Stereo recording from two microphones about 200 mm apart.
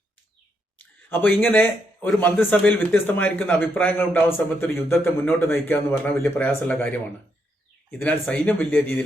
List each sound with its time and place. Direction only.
0.8 s a sound: 10° left (ahead or behind)
2.0 s a man's voice: 10° left (ahead or behind)
7.9 s a man's voice: 5° left (ahead or behind)